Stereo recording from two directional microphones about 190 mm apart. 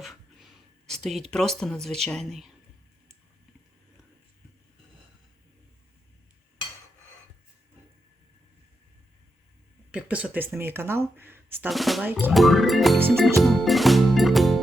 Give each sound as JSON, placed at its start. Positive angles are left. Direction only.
{"t": 0.0, "sound": "a sound", "side_deg": 0}
{"t": 1.3, "sound": "croak", "side_deg": 5}
{"t": 9.9, "sound": "speech", "side_deg": -5}
{"t": 11.7, "sound": "croak", "side_deg": 0}
{"t": 13.1, "sound": "music", "side_deg": 0}